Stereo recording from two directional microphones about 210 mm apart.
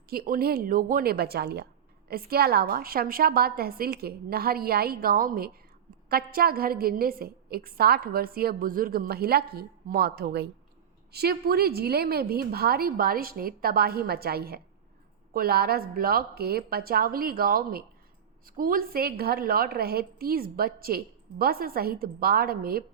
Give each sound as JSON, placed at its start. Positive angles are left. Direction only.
{"t": 0.1, "sound": "a woman's voice", "side_deg": -45}